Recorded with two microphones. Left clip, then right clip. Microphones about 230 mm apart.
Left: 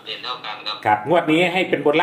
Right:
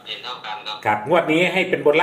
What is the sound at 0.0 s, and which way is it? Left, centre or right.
Speech, centre.